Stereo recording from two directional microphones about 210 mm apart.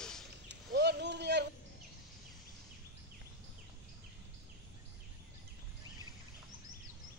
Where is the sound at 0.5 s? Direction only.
55° right (ahead or behind).